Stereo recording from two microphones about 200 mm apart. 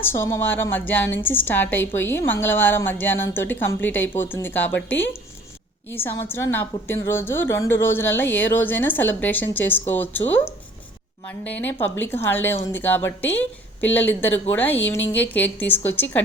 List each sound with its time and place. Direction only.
0.0 s a woman's voice: 10° left (ahead or behind)